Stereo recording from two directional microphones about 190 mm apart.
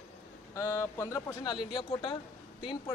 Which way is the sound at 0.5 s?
15° left (ahead or behind).